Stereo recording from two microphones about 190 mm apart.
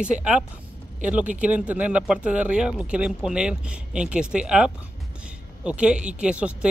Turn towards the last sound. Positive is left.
turn(degrees=-5)  # may be behind; listen again after turning